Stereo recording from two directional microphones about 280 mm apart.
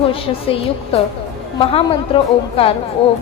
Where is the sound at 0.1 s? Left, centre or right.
Centre.